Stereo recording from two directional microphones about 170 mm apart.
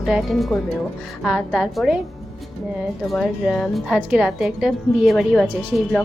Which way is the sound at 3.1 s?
Centre (ahead or behind).